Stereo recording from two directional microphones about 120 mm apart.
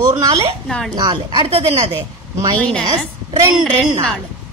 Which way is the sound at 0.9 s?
35° right (ahead or behind).